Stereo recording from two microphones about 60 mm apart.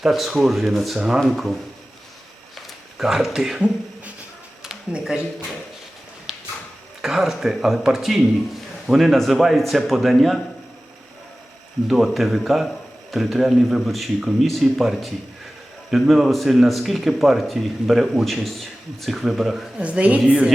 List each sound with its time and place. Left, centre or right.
0.0 s speech: centre
1.2 s speech: centre
2.6 s a sound: centre
4.6 s a sound: centre
6.3 s clip-clop: centre
7.0 s speech: centre
11.9 s speech: centre
19.8 s speech: right